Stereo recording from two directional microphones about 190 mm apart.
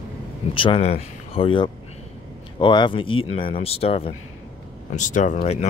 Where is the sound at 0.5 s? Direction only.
30° left (ahead or behind).